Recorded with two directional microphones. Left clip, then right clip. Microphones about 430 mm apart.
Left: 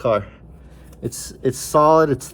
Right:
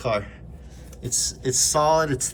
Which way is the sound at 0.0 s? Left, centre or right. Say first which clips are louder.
Left 6 dB; centre.